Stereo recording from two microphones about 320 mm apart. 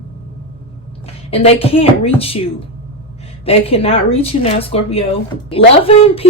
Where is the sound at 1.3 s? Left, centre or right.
Centre.